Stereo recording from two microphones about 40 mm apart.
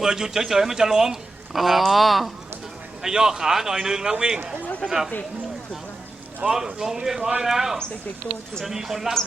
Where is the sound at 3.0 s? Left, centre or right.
Centre.